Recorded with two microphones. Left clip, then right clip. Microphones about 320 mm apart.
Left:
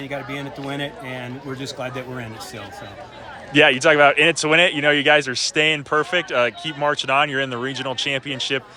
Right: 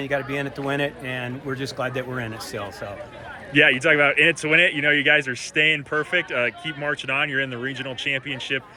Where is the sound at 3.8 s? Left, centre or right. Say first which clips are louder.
Left 3 dB; centre.